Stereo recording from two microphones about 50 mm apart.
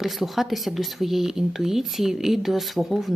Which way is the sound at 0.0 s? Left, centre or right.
Centre.